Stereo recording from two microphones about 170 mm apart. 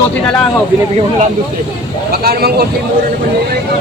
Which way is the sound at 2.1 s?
65° right (ahead or behind).